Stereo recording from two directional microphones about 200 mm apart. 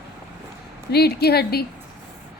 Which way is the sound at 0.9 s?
55° left (ahead or behind).